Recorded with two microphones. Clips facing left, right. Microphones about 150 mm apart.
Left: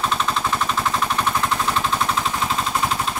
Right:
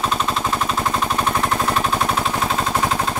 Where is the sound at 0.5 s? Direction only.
35° right (ahead or behind).